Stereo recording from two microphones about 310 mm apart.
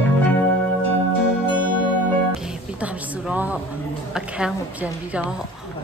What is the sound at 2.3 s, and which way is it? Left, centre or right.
Music, centre.